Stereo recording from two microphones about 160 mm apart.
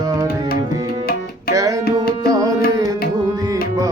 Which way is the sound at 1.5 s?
20° right (ahead or behind).